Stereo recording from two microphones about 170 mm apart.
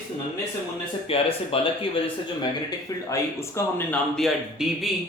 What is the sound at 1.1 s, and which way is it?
Speech, 35° left (ahead or behind).